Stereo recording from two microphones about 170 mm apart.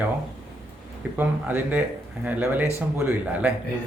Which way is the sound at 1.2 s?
10° right (ahead or behind).